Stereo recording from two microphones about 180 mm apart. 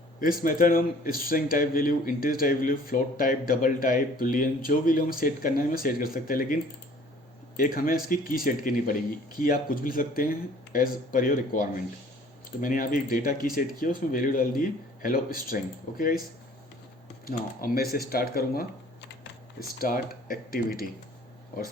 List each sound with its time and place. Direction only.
0.2 s a man's voice: 50° left (ahead or behind)
17.9 s a man's voice: 55° left (ahead or behind)